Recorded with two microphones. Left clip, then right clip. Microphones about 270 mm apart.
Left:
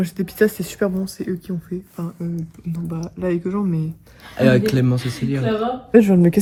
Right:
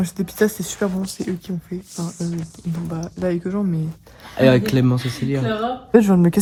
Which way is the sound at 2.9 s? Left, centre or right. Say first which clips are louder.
Even; centre.